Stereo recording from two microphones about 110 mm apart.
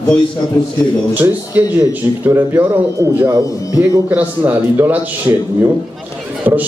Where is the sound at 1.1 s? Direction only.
15° right (ahead or behind).